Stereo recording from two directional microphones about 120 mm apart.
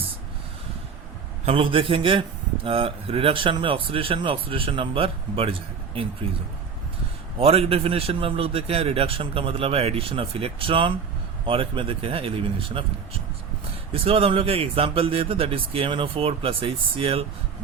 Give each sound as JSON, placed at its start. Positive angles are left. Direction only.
{"t": 1.5, "sound": "a man's voice", "side_deg": -50}
{"t": 7.3, "sound": "a man's voice", "side_deg": -55}
{"t": 13.9, "sound": "a man's voice", "side_deg": -55}